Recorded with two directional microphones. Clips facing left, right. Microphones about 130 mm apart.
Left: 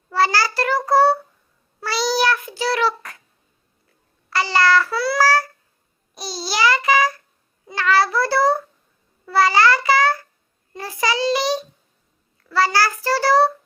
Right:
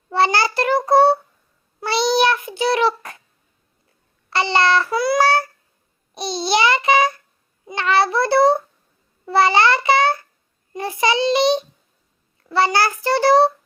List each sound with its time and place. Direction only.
0.1 s child singing: 25° right (ahead or behind)
4.3 s babbling: 25° right (ahead or behind)
7.7 s child singing: 20° right (ahead or behind)
9.2 s babbling: 25° right (ahead or behind)
10.8 s child singing: 20° right (ahead or behind)